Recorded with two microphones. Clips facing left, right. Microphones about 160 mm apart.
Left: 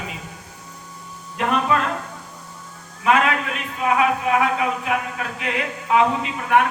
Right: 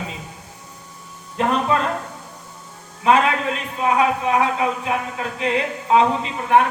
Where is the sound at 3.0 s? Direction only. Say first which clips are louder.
Right 2 dB; 30° right (ahead or behind).